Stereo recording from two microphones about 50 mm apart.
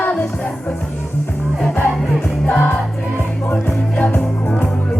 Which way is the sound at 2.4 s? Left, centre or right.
Left.